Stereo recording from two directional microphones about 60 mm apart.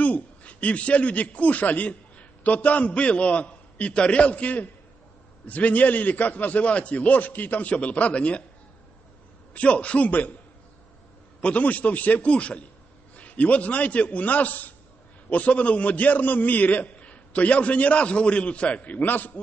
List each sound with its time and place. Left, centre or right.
0.0 s a man's voice: left
9.5 s a man's voice: left
11.4 s a man's voice: left